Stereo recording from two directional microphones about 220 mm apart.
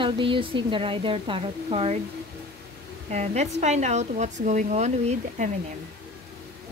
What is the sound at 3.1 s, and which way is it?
Speech, 30° right (ahead or behind).